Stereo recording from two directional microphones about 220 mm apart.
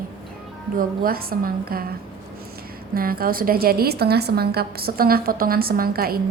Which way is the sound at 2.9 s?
40° right (ahead or behind).